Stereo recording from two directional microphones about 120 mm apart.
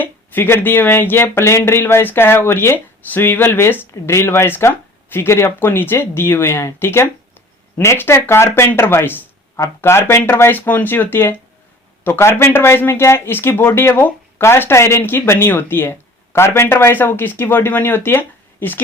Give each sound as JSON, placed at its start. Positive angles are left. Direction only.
{"t": 0.0, "sound": "speech", "side_deg": 15}